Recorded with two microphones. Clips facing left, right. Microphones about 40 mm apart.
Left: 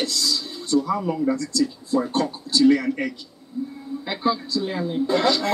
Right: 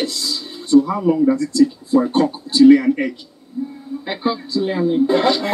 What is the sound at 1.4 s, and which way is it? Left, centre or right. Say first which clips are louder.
Speech: right 8 dB; right.